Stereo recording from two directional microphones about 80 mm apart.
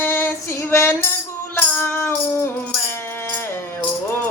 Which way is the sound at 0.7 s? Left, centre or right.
Left.